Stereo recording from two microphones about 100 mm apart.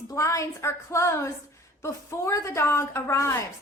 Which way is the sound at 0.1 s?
30° left (ahead or behind).